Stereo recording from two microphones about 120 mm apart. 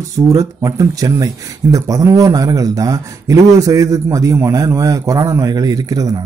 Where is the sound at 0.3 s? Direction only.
30° right (ahead or behind).